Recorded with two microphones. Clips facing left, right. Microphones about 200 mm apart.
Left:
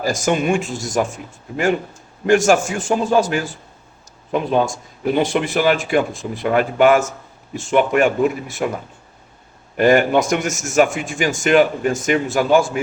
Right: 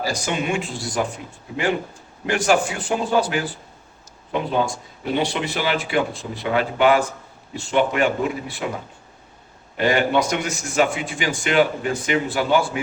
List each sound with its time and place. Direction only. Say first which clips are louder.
0.0 s a man's voice: left 6 dB; 50° left (ahead or behind)
2.2 s a man's voice: left 5 dB; 45° left (ahead or behind)
9.7 s a man's voice: left 5 dB; 50° left (ahead or behind)